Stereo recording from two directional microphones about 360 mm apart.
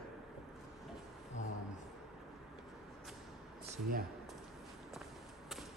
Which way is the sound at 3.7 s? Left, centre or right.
Right.